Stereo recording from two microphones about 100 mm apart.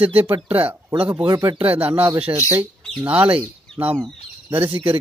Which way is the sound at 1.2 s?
40° right (ahead or behind).